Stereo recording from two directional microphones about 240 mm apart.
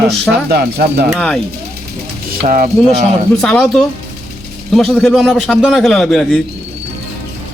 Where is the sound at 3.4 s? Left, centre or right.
Centre.